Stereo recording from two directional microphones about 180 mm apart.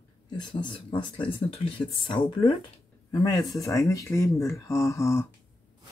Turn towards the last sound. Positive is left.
turn(degrees=15)  # may be behind; listen again after turning